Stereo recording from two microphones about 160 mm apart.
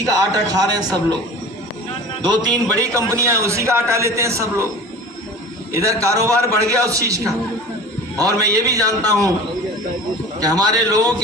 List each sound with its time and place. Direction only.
0.0 s a man's voice: 25° right (ahead or behind)
2.2 s a man's voice: 25° right (ahead or behind)
5.7 s a man's voice: 20° right (ahead or behind)
10.4 s a man's voice: 25° right (ahead or behind)